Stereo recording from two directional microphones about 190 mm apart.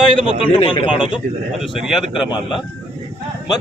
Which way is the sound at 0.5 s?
25° left (ahead or behind).